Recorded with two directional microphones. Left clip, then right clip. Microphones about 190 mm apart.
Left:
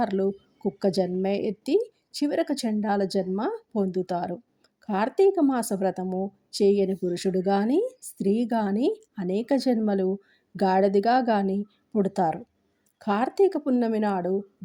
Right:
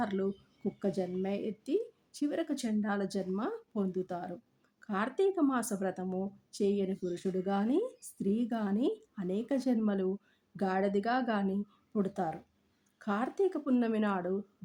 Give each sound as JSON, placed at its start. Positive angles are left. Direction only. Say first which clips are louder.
{"t": 0.0, "sound": "speech", "louder": "left 9 dB", "side_deg": 25}